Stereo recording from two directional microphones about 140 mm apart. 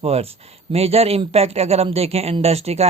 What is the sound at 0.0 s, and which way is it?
Speech, 45° right (ahead or behind).